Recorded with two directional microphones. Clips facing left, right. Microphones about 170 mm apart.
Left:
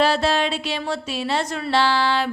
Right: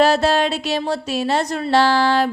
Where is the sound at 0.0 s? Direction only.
45° right (ahead or behind).